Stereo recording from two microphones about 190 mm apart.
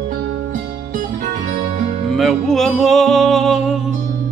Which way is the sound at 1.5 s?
45° right (ahead or behind).